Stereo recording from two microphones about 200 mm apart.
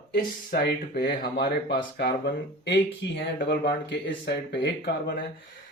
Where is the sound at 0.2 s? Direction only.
50° left (ahead or behind).